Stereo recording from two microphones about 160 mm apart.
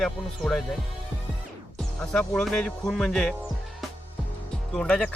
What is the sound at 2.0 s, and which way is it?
Speech, 5° left (ahead or behind).